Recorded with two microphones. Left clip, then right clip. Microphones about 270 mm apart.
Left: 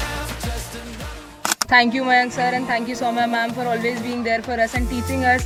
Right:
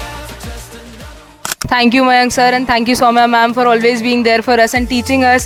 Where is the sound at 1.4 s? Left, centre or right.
Centre.